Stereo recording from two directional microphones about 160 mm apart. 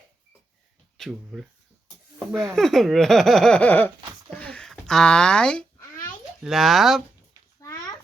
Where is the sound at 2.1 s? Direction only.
Centre (ahead or behind).